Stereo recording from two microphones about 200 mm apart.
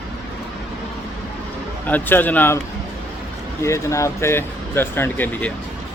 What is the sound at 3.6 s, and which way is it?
Speech, 15° left (ahead or behind).